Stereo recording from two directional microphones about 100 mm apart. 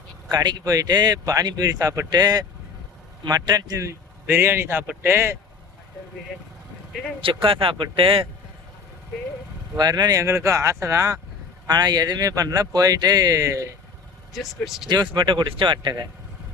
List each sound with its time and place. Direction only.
0.3 s speech: 45° right (ahead or behind)
2.0 s speech: 45° right (ahead or behind); by 5.4 s 25° right (ahead or behind)
7.2 s a man's voice: 65° right (ahead or behind)
9.7 s speech: 45° right (ahead or behind)
14.3 s speech: centre (ahead or behind)
14.8 s speech: 50° right (ahead or behind)